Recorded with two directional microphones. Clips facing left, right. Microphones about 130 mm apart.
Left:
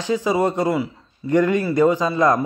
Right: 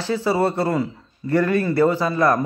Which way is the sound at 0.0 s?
15° left (ahead or behind).